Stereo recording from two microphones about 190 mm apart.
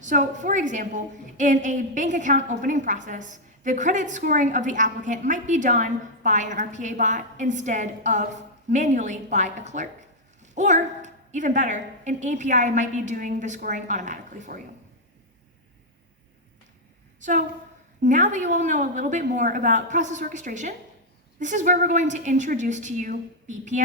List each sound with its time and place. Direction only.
0.0 s a woman's voice: 40° right (ahead or behind)
17.2 s a woman's voice: 40° right (ahead or behind)